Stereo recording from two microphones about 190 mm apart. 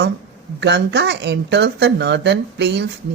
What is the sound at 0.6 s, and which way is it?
Speech, 65° right (ahead or behind).